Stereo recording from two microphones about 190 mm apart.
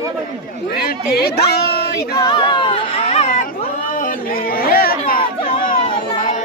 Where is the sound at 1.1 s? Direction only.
55° left (ahead or behind).